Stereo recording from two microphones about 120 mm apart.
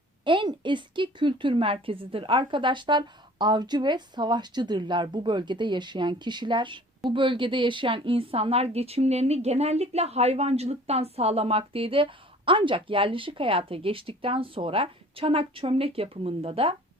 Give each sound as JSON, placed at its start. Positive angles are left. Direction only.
{"t": 0.3, "sound": "a woman's voice", "side_deg": -40}